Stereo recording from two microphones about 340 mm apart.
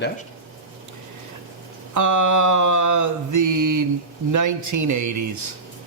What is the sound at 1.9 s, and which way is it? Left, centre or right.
Mantra, right.